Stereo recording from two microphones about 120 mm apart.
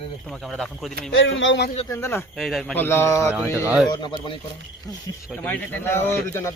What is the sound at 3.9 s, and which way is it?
Speech, 40° left (ahead or behind).